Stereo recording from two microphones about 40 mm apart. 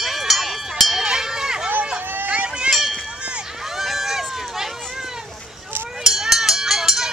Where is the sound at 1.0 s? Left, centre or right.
Centre.